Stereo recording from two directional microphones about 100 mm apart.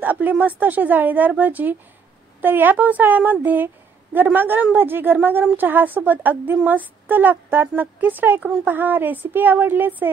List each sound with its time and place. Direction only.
0.0 s a woman's voice: 15° right (ahead or behind)